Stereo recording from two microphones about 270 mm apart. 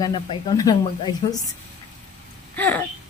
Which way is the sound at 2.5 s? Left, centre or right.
Centre.